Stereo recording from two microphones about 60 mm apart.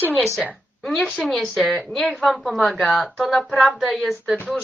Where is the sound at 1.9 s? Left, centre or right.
Centre.